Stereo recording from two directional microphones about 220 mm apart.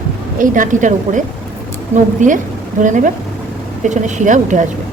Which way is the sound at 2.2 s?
35° right (ahead or behind).